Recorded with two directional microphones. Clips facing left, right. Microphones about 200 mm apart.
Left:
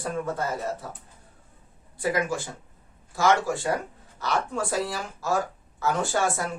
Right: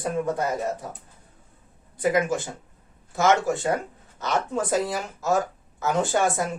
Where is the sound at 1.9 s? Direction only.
20° right (ahead or behind).